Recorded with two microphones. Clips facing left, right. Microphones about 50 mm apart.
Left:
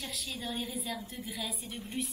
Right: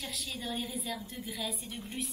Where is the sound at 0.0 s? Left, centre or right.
Centre.